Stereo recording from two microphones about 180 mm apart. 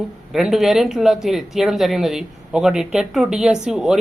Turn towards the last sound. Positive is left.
turn(degrees=-5)  # may be behind; listen again after turning